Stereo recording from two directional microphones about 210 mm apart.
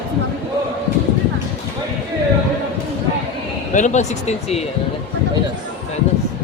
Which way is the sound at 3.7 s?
35° left (ahead or behind).